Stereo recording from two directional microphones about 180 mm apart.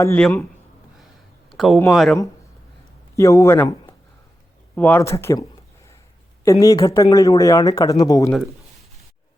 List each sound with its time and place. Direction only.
0.0 s speech: 15° left (ahead or behind)
1.5 s a sound: centre (ahead or behind)
1.9 s speech: centre (ahead or behind)
3.2 s speech: 15° left (ahead or behind)
6.4 s speech: 20° left (ahead or behind)